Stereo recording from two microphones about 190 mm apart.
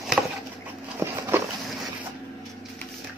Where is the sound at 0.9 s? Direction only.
15° right (ahead or behind).